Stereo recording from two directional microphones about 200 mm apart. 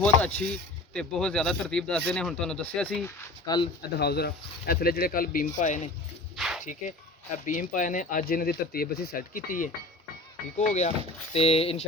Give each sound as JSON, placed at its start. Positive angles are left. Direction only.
{"t": 0.0, "sound": "speech", "side_deg": 5}
{"t": 3.4, "sound": "speech", "side_deg": 20}
{"t": 3.9, "sound": "speech", "side_deg": 55}
{"t": 6.3, "sound": "dog", "side_deg": 0}
{"t": 7.4, "sound": "speech", "side_deg": 40}